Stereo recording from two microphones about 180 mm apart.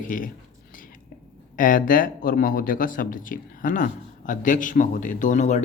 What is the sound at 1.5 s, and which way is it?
Speech, 50° left (ahead or behind).